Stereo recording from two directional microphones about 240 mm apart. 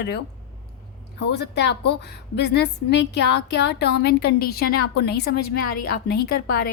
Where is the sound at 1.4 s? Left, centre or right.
Left.